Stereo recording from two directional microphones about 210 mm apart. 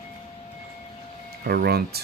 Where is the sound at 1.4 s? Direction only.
50° right (ahead or behind).